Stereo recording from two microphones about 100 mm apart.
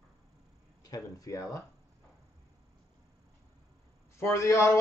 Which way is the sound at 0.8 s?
40° left (ahead or behind).